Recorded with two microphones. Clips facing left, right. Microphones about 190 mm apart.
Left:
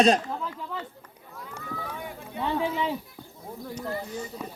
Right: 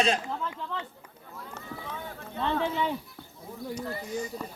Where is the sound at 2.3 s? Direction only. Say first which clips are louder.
Left 1 dB; 10° left (ahead or behind).